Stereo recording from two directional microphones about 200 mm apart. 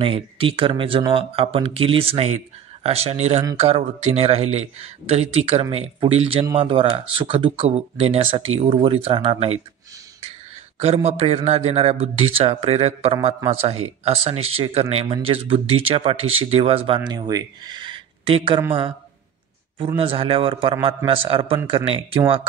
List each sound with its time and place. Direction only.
0.0 s a man's voice: 25° right (ahead or behind)
11.1 s a man's voice: 30° right (ahead or behind)
20.0 s speech: 25° right (ahead or behind)